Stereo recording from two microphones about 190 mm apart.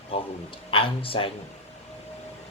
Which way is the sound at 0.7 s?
30° left (ahead or behind).